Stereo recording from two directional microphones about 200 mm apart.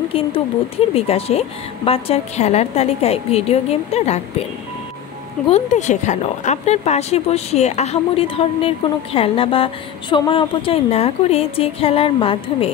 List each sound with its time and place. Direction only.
0.1 s a woman's voice: 30° left (ahead or behind)
5.5 s speech: 35° left (ahead or behind)